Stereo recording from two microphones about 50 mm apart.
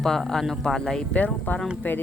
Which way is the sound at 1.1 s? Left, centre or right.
Left.